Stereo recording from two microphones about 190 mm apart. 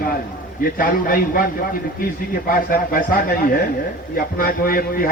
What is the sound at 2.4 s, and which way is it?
A man's voice, 50° left (ahead or behind).